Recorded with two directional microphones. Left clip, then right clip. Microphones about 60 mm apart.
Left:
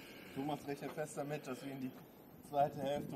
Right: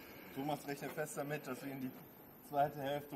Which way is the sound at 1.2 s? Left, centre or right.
Centre.